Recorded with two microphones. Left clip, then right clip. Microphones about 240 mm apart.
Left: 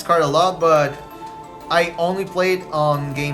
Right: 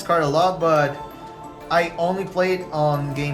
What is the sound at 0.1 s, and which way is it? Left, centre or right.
Speech, centre.